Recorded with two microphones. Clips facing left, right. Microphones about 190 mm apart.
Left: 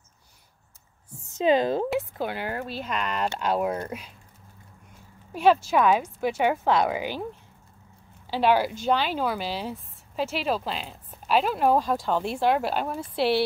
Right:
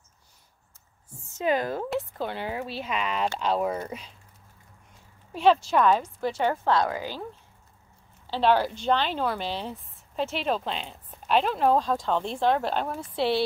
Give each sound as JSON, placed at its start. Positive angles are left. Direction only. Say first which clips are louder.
{"t": 1.3, "sound": "speech", "louder": "left 5 dB", "side_deg": 25}
{"t": 1.9, "sound": "speech", "louder": "left 2 dB", "side_deg": 5}
{"t": 5.3, "sound": "speech", "louder": "left 1 dB", "side_deg": 5}
{"t": 8.3, "sound": "speech", "louder": "left 1 dB", "side_deg": 10}